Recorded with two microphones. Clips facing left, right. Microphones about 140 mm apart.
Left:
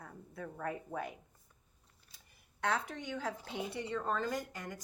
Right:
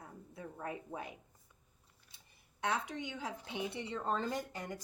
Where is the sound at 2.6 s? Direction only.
20° right (ahead or behind).